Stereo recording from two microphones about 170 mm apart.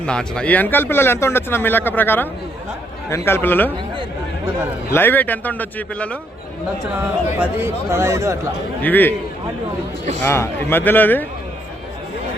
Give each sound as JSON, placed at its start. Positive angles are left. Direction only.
{"t": 0.0, "sound": "speech", "side_deg": 5}
{"t": 4.9, "sound": "speech", "side_deg": 10}
{"t": 7.3, "sound": "speech", "side_deg": -15}
{"t": 8.8, "sound": "speech", "side_deg": 10}
{"t": 10.2, "sound": "speech", "side_deg": 15}